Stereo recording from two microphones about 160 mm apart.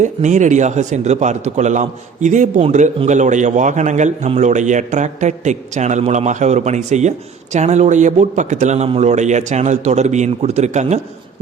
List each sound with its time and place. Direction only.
0.0 s a man's voice: 50° right (ahead or behind)